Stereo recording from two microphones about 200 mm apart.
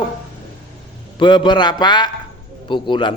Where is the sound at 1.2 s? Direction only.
20° left (ahead or behind).